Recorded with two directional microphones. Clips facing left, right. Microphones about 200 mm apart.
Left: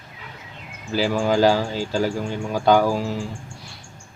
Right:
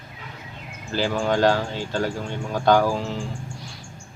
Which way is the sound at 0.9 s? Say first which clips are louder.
Left 2 dB; 5° left (ahead or behind).